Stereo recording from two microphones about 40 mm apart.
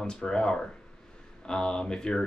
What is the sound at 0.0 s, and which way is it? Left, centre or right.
Speech, centre.